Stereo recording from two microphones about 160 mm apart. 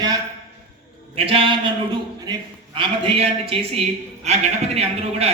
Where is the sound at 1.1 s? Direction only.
35° right (ahead or behind).